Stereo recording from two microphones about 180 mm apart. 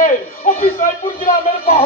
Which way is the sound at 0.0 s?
45° left (ahead or behind).